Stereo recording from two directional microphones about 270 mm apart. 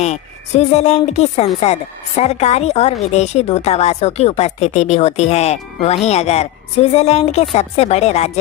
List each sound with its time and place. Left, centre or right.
0.0 s speech: left